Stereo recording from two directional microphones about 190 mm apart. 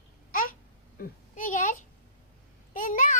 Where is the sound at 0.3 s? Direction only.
45° left (ahead or behind).